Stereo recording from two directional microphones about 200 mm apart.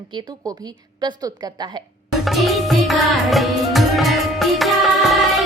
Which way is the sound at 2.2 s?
Centre (ahead or behind).